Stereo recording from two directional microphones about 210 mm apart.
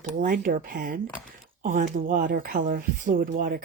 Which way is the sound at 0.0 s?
40° right (ahead or behind).